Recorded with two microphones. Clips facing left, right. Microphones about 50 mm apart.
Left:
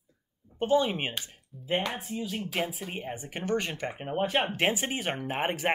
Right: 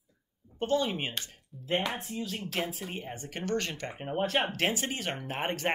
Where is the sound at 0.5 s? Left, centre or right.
Centre.